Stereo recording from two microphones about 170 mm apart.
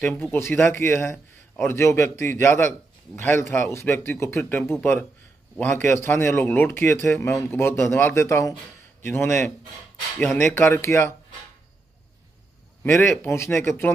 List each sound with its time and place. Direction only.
0.0 s a man's voice: 10° left (ahead or behind)
13.1 s a man's voice: 10° left (ahead or behind)